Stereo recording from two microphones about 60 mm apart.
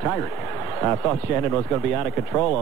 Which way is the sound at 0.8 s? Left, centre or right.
Centre.